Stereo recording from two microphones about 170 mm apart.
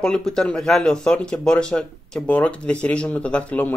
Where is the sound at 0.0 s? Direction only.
5° left (ahead or behind).